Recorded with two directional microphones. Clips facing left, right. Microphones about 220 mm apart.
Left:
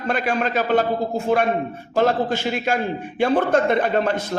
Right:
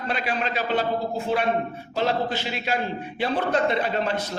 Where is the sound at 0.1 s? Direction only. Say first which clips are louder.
Left 6 dB; 50° left (ahead or behind).